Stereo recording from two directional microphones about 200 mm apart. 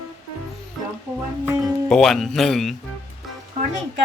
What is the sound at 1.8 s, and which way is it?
Speech, 5° left (ahead or behind).